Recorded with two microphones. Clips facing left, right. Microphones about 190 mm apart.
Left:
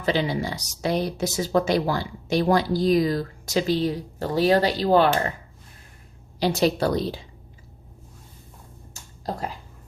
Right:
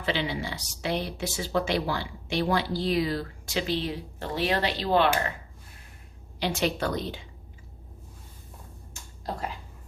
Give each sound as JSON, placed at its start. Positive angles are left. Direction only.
{"t": 0.0, "sound": "speech", "side_deg": 40}
{"t": 6.4, "sound": "speech", "side_deg": 35}
{"t": 8.9, "sound": "a sound", "side_deg": 35}